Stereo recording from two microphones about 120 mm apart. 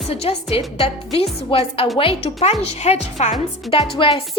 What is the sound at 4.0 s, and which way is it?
Speech, 50° left (ahead or behind).